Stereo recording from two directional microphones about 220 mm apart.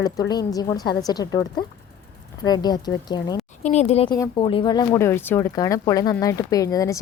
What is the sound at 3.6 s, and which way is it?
Speech, 30° left (ahead or behind).